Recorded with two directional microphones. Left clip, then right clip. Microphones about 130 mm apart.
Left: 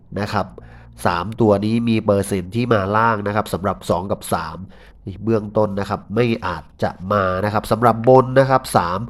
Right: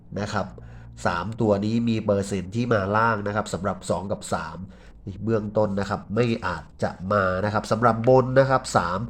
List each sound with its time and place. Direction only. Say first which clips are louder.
0.1 s speech: left 6 dB; 30° left (ahead or behind)